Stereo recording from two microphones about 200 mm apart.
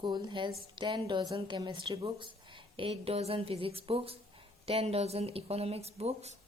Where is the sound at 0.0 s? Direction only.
20° right (ahead or behind).